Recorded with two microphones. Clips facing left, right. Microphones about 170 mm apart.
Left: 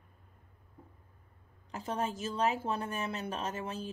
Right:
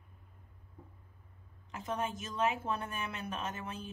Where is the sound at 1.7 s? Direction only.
30° left (ahead or behind).